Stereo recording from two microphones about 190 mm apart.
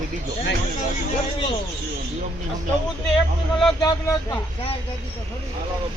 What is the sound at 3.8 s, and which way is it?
Speech, 20° left (ahead or behind).